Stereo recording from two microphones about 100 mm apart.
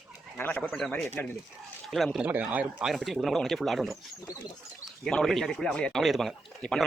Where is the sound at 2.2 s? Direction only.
15° right (ahead or behind).